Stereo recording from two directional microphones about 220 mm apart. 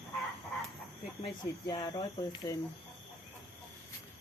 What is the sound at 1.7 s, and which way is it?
Speech, 20° left (ahead or behind).